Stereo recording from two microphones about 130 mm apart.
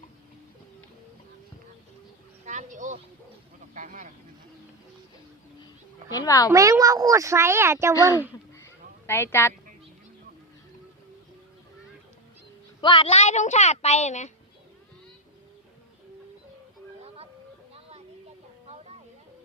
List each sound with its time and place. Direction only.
2.4 s speech: 70° right (ahead or behind); by 4.1 s 85° right
6.1 s speech: 30° left (ahead or behind)
6.5 s speech: 25° right (ahead or behind)
8.5 s honk: 20° left (ahead or behind)
12.8 s speech: 40° left (ahead or behind)
13.1 s a woman's voice: 60° left (ahead or behind)